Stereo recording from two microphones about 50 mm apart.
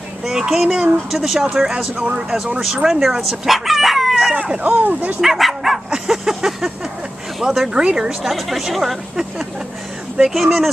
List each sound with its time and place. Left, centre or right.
0.2 s speech: centre
2.0 s speech: right
2.6 s speech: centre
4.6 s speech: right
5.2 s speech: centre
5.9 s a sound: centre
7.3 s speech: centre
8.2 s speech: centre